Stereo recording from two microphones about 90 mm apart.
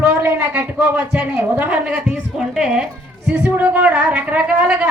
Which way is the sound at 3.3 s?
20° right (ahead or behind).